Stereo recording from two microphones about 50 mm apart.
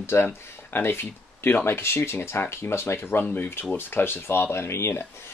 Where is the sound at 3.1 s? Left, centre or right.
Left.